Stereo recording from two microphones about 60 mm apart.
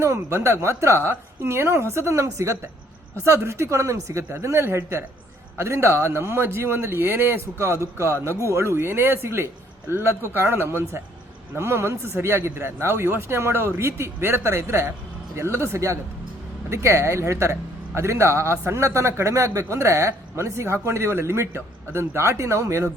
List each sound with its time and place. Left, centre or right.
0.0 s a man's voice: right